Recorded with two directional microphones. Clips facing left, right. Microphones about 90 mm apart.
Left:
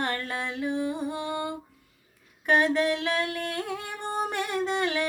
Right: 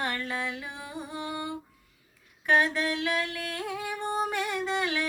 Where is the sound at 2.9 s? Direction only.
40° left (ahead or behind).